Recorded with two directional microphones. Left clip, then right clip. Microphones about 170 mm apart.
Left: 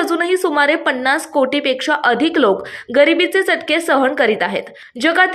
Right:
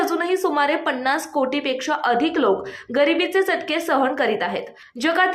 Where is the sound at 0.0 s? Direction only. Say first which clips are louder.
Left 4 dB; 25° left (ahead or behind).